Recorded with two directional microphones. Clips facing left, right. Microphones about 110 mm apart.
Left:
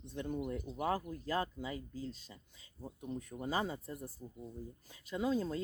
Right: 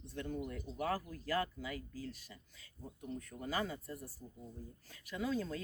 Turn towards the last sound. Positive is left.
turn(degrees=25)  # may be behind; listen again after turning